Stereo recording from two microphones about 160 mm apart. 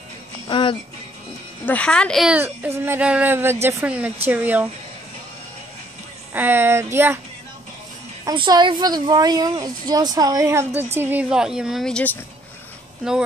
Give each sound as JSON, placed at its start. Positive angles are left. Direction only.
{"t": 0.5, "sound": "music", "side_deg": 30}
{"t": 1.7, "sound": "a woman's voice", "side_deg": 5}
{"t": 2.3, "sound": "speech", "side_deg": -10}
{"t": 6.3, "sound": "speech", "side_deg": -10}
{"t": 8.3, "sound": "a woman's voice", "side_deg": -25}